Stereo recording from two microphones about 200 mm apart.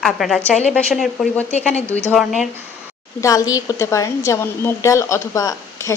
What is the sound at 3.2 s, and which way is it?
A woman's voice, 15° left (ahead or behind).